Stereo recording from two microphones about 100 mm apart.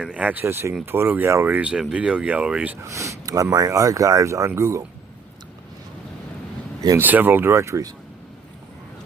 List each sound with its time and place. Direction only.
0.0 s speech: 10° right (ahead or behind)
0.4 s speech: 25° right (ahead or behind)
2.8 s speech: 30° right (ahead or behind)
7.0 s speech: 20° right (ahead or behind)